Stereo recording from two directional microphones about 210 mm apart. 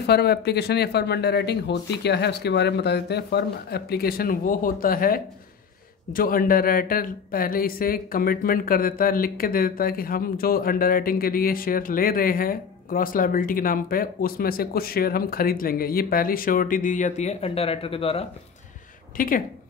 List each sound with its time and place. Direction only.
0.0 s speech: 50° left (ahead or behind); by 18.2 s 25° left (ahead or behind)
19.1 s speech: 40° left (ahead or behind)